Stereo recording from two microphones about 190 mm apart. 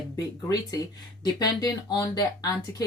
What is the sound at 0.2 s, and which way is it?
Speech, 15° left (ahead or behind).